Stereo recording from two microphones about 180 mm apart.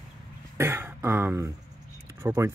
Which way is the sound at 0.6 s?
15° right (ahead or behind).